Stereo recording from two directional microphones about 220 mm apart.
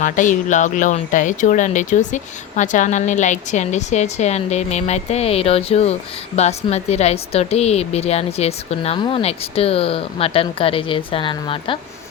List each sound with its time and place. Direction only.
0.0 s a woman's voice: 35° left (ahead or behind)